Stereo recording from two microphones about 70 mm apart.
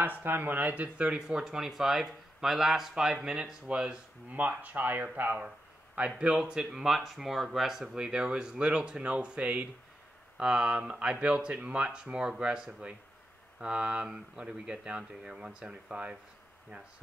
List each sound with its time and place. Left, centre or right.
0.0 s speech: right